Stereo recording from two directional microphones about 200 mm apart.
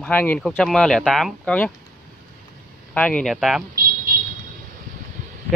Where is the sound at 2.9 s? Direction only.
5° left (ahead or behind).